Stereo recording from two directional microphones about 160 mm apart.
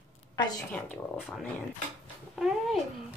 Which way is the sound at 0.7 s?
Centre (ahead or behind).